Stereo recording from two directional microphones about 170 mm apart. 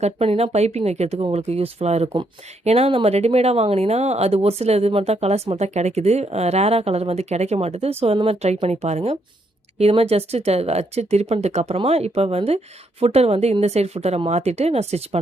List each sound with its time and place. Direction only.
0.0 s speech: 35° right (ahead or behind)